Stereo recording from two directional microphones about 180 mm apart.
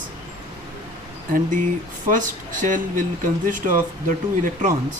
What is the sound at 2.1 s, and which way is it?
Speech, 45° right (ahead or behind).